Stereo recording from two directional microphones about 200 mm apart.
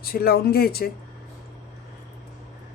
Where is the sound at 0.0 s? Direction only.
50° left (ahead or behind).